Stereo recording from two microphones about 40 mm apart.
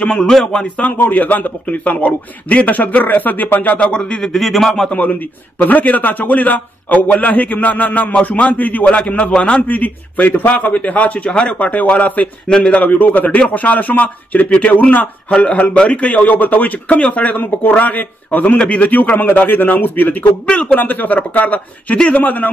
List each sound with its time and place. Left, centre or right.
0.3 s a man's voice: centre
1.1 s a man's voice: left
3.8 s a man's voice: left
4.4 s a man's voice: centre
5.6 s a man's voice: left
8.8 s a man's voice: left
9.6 s speech: left
11.5 s speech: left
12.4 s a man's voice: left
12.7 s speech: left
15.3 s a man's voice: left